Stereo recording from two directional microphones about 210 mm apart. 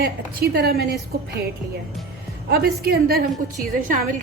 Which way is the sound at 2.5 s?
50° right (ahead or behind).